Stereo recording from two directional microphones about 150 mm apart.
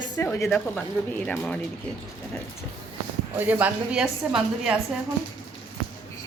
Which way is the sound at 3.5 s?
10° right (ahead or behind).